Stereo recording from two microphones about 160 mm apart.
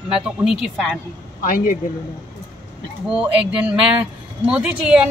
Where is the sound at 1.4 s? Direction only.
60° left (ahead or behind).